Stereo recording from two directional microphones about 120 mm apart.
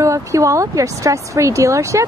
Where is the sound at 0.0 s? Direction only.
25° right (ahead or behind).